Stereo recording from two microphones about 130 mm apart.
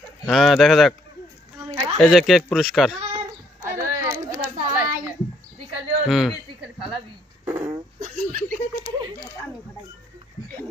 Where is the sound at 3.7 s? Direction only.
20° right (ahead or behind).